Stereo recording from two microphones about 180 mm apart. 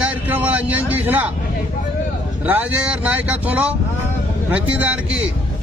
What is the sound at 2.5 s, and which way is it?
Speech, 10° right (ahead or behind).